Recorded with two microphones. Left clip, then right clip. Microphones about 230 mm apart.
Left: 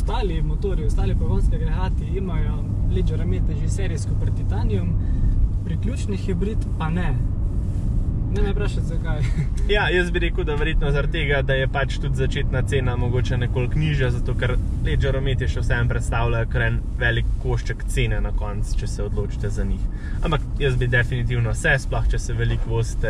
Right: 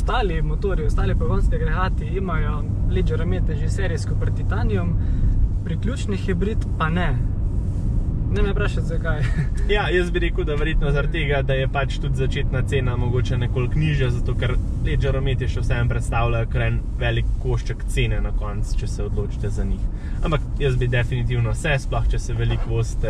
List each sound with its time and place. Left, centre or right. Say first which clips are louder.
0.1 s speech: right 4 dB; centre
8.3 s speech: right 3 dB; centre
20.2 s speech: even; centre